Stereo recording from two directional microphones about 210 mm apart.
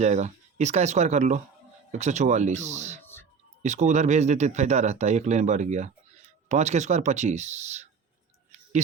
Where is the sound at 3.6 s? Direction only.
35° right (ahead or behind).